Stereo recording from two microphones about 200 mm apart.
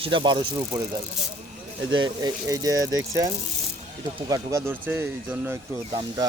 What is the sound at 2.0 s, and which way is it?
Speech, 20° right (ahead or behind).